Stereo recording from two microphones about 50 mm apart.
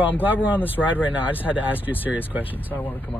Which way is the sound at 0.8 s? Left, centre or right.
Centre.